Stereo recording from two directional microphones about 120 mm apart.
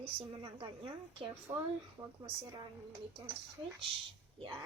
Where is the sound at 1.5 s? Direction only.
25° right (ahead or behind).